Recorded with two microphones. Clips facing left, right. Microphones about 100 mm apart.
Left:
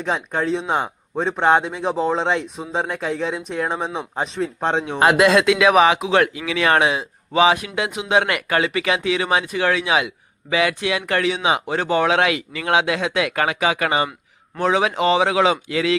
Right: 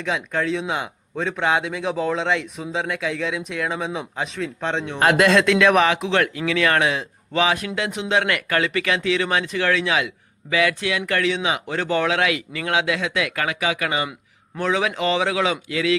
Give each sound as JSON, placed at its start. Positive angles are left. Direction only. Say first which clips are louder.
{"t": 0.0, "sound": "speech", "louder": "left 1 dB", "side_deg": 35}
{"t": 4.9, "sound": "speech", "louder": "left 1 dB", "side_deg": 10}
{"t": 7.9, "sound": "speech", "louder": "even", "side_deg": 10}
{"t": 8.1, "sound": "speech", "louder": "left 3 dB", "side_deg": 20}